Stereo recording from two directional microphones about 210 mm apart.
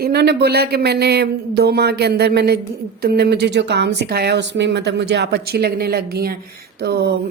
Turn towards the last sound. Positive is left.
turn(degrees=-50)  # may be behind; listen again after turning